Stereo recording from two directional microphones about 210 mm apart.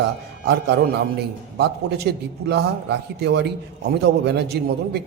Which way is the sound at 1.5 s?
50° right (ahead or behind).